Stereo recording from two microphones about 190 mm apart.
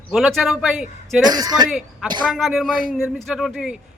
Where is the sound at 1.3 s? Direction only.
20° right (ahead or behind).